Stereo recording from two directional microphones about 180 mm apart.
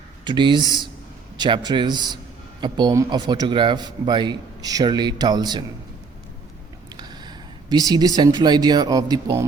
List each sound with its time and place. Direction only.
0.3 s a man's voice: 25° right (ahead or behind)
6.9 s speech: 25° right (ahead or behind)